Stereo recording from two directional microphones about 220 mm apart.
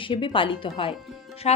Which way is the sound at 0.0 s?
25° left (ahead or behind).